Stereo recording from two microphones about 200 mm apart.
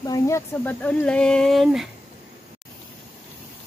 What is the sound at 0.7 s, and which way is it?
Speech, 5° left (ahead or behind).